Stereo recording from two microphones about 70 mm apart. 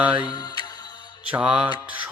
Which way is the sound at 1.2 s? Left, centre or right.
Centre.